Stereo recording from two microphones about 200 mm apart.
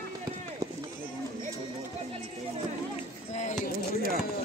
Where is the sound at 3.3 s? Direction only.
35° left (ahead or behind).